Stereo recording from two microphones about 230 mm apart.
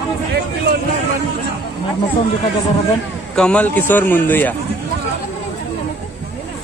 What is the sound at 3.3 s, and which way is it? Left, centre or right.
A man's voice, centre.